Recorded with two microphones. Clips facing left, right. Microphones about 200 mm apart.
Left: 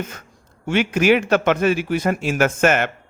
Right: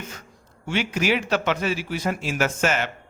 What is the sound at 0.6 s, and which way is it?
A man's voice, 55° left (ahead or behind).